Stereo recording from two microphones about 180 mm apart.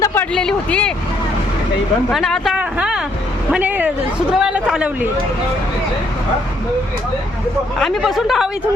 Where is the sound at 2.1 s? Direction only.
Centre (ahead or behind).